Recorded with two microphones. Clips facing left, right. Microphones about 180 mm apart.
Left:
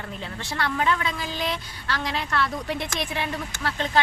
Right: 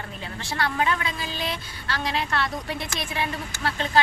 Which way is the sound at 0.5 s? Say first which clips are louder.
Even; 15° right (ahead or behind).